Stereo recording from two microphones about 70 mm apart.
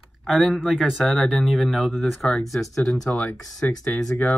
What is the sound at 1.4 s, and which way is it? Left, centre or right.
Speech, centre.